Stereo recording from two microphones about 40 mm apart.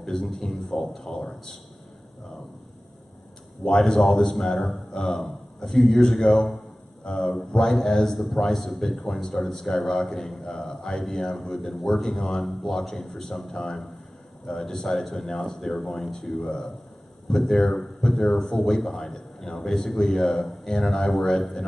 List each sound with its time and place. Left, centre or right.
0.0 s a man's voice: centre
3.8 s a man's voice: centre
7.7 s a man's voice: centre